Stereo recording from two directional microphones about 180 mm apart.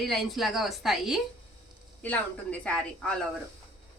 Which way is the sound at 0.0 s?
Centre (ahead or behind).